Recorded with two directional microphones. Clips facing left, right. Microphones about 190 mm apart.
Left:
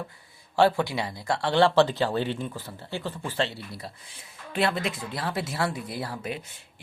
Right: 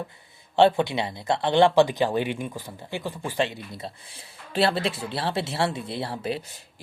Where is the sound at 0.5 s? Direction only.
20° right (ahead or behind).